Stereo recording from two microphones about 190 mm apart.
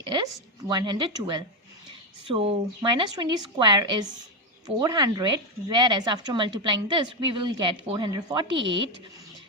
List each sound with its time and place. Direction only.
0.7 s speech: 20° right (ahead or behind)